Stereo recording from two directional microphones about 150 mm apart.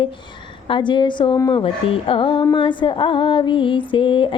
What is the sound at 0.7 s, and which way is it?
Music, 30° left (ahead or behind).